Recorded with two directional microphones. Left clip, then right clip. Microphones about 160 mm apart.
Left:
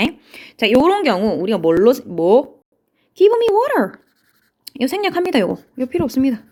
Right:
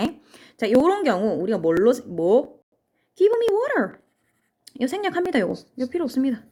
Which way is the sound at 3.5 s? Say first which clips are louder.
Left 6 dB; 25° left (ahead or behind).